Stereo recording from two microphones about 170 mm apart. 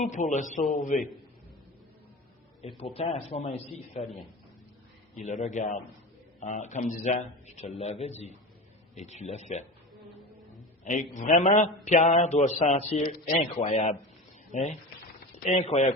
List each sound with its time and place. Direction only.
0.0 s a man's voice: 45° left (ahead or behind)
2.9 s a man's voice: 40° left (ahead or behind)
5.2 s a man's voice: 45° left (ahead or behind)
10.8 s a man's voice: 45° left (ahead or behind)